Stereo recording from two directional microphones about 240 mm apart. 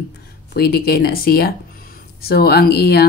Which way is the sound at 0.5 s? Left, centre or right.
Left.